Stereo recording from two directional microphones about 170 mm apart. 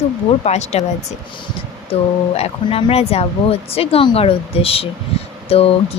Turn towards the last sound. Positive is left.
turn(degrees=35)  # may be behind; listen again after turning